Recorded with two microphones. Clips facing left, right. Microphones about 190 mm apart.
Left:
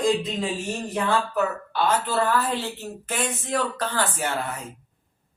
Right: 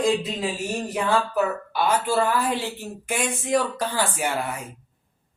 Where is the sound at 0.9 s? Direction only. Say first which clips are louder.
Right 1 dB; 10° right (ahead or behind).